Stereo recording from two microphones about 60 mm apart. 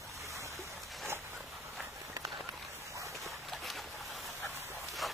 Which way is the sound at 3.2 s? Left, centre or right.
Centre.